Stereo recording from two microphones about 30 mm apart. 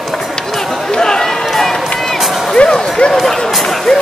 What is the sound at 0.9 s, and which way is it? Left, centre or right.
Chatter, left.